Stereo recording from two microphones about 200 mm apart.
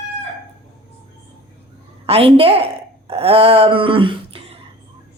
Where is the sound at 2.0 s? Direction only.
30° right (ahead or behind).